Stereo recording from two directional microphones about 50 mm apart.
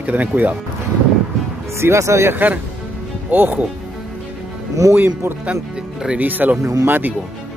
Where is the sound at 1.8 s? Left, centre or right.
Right.